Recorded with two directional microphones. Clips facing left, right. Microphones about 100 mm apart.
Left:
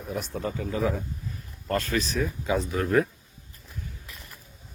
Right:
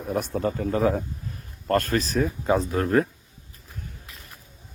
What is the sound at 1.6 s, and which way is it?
Speech, 50° right (ahead or behind).